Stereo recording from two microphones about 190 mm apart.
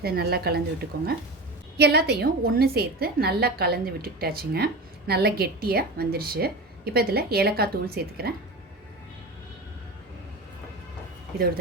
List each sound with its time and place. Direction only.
0.0 s a woman's voice: 55° right (ahead or behind)
11.3 s speech: 50° right (ahead or behind)